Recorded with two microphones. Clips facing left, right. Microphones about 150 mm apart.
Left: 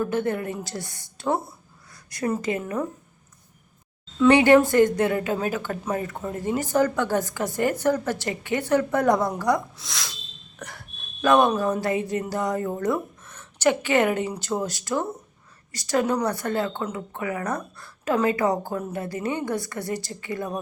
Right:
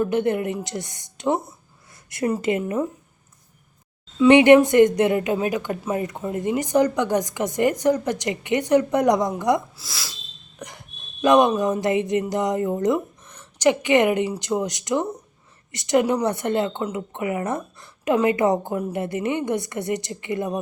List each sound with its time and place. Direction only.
0.0 s a woman's voice: 20° right (ahead or behind)
4.3 s speech: 20° right (ahead or behind)
9.7 s speech: 5° right (ahead or behind)
10.6 s a sound: 15° right (ahead or behind)
11.8 s a woman's voice: 20° right (ahead or behind)